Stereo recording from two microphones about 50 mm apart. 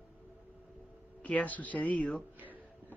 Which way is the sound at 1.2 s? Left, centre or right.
Left.